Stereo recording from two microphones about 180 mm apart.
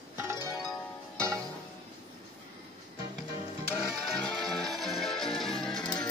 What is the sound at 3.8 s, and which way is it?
Music, centre (ahead or behind).